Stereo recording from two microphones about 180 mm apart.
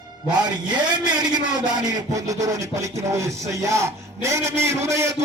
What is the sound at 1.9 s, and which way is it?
Music, 20° right (ahead or behind).